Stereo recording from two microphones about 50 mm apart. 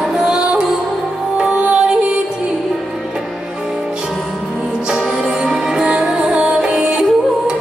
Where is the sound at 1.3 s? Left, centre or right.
Centre.